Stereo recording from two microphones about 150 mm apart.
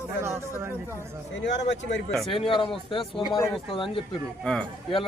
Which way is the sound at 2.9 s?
35° left (ahead or behind).